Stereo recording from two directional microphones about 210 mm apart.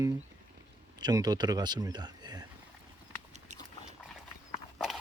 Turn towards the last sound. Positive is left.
turn(degrees=0)  # may be behind; listen again after turning